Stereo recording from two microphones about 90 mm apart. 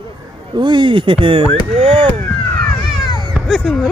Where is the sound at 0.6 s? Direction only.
65° right (ahead or behind).